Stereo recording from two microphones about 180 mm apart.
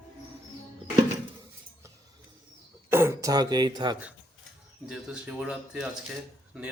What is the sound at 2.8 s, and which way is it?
Speech, 15° right (ahead or behind).